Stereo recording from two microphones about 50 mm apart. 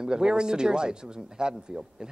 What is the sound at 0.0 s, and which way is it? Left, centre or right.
Speech, centre.